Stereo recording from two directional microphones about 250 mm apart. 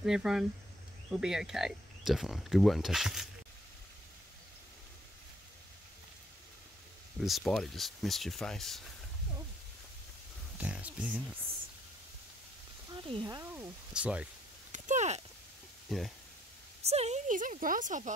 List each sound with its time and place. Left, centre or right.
0.0 s speech: centre
7.2 s speech: centre
10.6 s speech: centre
12.9 s speech: centre
14.7 s a sound: right
15.9 s speech: centre
16.8 s speech: right